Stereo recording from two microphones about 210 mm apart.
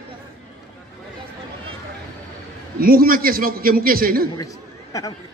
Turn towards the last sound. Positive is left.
turn(degrees=15)  # may be behind; listen again after turning